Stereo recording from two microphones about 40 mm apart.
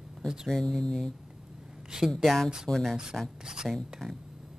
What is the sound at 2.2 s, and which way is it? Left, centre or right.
Speech, centre.